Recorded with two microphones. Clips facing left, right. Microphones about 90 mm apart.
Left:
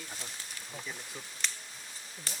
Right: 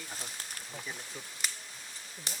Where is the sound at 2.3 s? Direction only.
20° right (ahead or behind).